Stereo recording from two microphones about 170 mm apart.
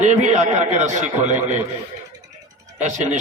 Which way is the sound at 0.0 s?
45° right (ahead or behind).